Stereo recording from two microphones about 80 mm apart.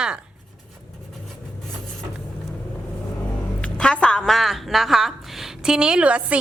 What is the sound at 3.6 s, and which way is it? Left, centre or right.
Music, centre.